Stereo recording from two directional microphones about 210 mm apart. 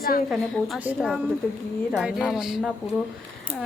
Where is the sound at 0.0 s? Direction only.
45° left (ahead or behind).